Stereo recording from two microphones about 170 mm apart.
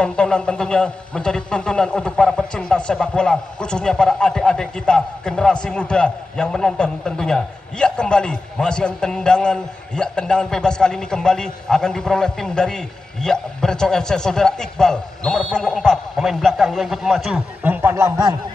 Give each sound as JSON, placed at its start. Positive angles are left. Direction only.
{"t": 0.0, "sound": "a man's voice", "side_deg": 5}